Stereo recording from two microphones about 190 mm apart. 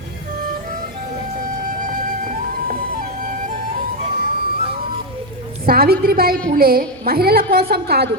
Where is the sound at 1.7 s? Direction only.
45° right (ahead or behind).